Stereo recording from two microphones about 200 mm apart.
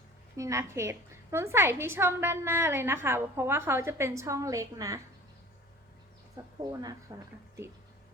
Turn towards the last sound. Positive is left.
turn(degrees=-20)  # may be behind; listen again after turning